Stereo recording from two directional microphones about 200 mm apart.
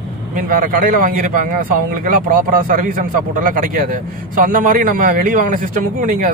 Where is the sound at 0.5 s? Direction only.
45° right (ahead or behind).